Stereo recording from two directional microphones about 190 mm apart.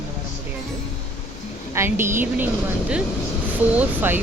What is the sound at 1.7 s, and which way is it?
Speech, 15° right (ahead or behind).